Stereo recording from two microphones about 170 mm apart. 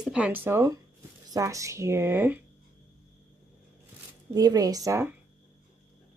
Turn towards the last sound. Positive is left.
turn(degrees=-15)  # may be behind; listen again after turning